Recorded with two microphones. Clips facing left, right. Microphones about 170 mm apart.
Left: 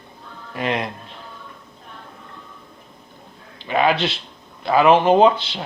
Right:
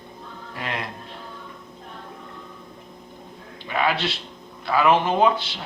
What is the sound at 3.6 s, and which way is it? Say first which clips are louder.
Speech: left 5 dB; 20° left (ahead or behind).